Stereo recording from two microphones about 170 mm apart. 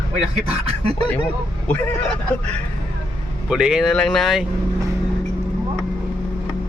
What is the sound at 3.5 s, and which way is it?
Speech, 5° right (ahead or behind).